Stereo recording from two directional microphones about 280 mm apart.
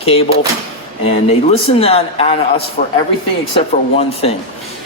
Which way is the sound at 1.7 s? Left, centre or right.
Left.